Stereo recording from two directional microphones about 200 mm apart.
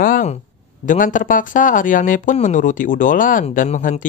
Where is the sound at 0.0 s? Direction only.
40° left (ahead or behind).